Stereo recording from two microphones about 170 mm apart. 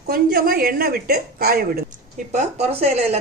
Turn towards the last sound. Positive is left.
turn(degrees=-40)  # may be behind; listen again after turning